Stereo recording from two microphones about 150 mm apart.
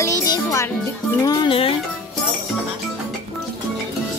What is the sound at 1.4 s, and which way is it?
Speech, 40° left (ahead or behind).